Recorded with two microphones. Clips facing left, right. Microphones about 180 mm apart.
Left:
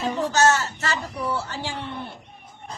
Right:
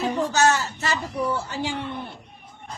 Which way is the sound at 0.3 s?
15° right (ahead or behind).